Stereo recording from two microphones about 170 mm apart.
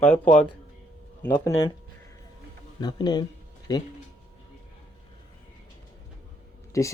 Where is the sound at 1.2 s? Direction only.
15° left (ahead or behind).